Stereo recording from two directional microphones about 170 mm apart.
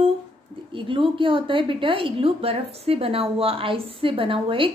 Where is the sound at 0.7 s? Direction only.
30° right (ahead or behind).